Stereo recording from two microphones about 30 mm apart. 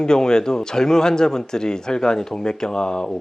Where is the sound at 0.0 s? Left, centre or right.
Left.